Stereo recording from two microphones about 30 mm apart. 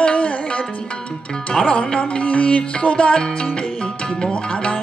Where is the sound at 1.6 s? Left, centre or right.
Left.